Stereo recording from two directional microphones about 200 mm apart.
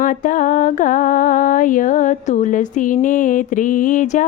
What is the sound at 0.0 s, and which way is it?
Mantra, 40° left (ahead or behind).